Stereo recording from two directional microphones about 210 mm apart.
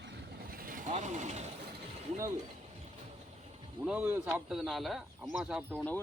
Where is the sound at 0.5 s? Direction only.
40° right (ahead or behind).